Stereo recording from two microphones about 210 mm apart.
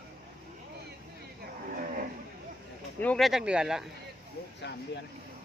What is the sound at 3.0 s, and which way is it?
Speech, 5° left (ahead or behind).